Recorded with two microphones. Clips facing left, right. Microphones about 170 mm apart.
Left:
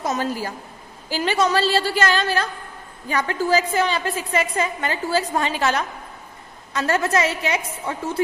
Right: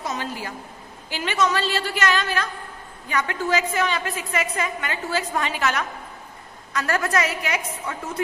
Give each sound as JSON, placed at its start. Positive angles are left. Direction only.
{"t": 0.0, "sound": "a woman's voice", "side_deg": 40}